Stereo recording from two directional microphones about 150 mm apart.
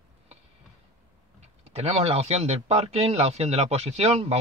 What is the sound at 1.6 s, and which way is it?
Speech, 45° right (ahead or behind).